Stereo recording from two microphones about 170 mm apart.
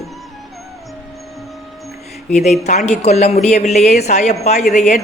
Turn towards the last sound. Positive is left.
turn(degrees=45)  # may be behind; listen again after turning